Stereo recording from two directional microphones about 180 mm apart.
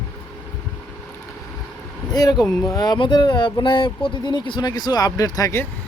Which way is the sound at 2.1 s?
20° left (ahead or behind).